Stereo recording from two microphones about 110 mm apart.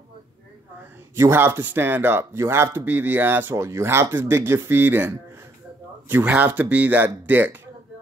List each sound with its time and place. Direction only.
1.1 s speech: 25° right (ahead or behind)